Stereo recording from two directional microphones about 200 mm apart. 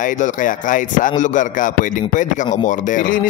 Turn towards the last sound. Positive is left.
turn(degrees=45)  # may be behind; listen again after turning